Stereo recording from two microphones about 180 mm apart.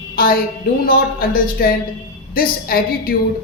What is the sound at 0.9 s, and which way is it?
A man's voice, 55° left (ahead or behind).